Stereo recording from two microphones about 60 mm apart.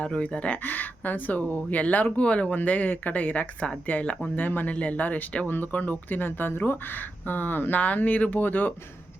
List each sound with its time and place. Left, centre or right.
0.0 s speech: centre